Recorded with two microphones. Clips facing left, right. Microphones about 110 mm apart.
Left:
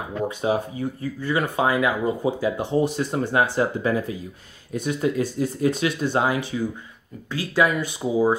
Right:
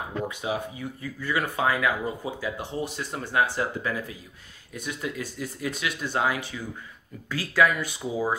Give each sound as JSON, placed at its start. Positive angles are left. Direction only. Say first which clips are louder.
{"t": 0.4, "sound": "speech", "louder": "left 7 dB", "side_deg": 35}
{"t": 1.2, "sound": "speech", "louder": "left 3 dB", "side_deg": 25}